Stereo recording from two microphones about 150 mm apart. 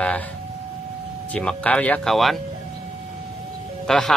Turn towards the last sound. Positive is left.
turn(degrees=5)  # may be behind; listen again after turning